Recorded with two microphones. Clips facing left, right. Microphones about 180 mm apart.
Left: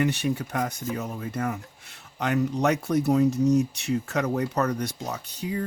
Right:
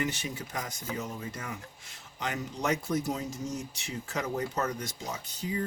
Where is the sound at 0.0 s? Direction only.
65° left (ahead or behind).